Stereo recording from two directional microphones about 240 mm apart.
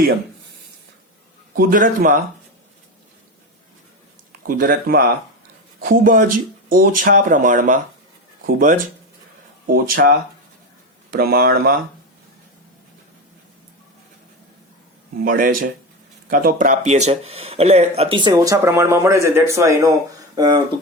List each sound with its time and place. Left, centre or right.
1.5 s speech: right
4.4 s speech: right
9.9 s speech: right
15.2 s speech: right; by 20.6 s centre